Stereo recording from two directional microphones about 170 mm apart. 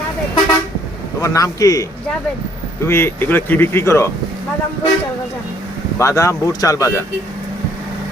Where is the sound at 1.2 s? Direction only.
20° left (ahead or behind).